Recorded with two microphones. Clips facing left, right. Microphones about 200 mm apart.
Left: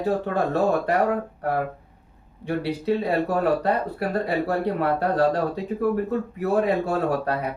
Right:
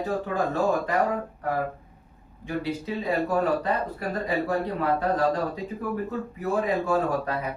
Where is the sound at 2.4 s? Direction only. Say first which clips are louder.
Left 5 dB; 65° left (ahead or behind).